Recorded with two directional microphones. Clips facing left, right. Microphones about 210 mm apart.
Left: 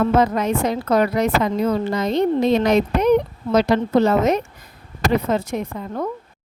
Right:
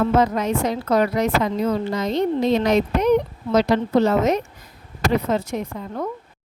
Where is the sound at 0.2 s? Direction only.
55° left (ahead or behind).